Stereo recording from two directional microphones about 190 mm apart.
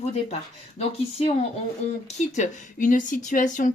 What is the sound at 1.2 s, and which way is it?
Speech, 35° left (ahead or behind).